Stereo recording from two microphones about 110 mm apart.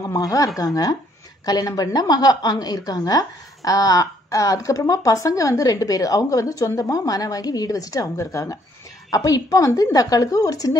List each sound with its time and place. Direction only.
0.0 s a woman's voice: 30° left (ahead or behind)